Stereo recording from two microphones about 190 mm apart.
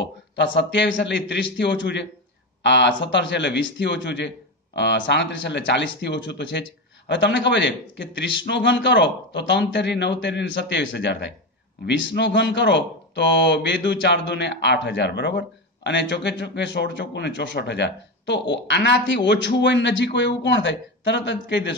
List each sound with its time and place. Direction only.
0.0 s speech: 70° left (ahead or behind)